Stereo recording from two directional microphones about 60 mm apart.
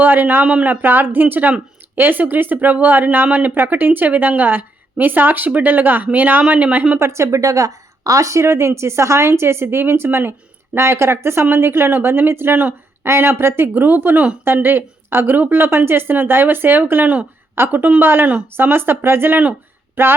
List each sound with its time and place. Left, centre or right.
0.0 s speech: right
0.4 s speech: centre
0.7 s a woman's voice: right
7.0 s a woman's voice: right